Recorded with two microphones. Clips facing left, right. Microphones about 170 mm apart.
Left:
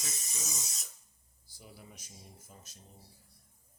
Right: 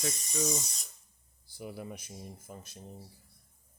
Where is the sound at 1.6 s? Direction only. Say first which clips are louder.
Right 12 dB; 65° right (ahead or behind).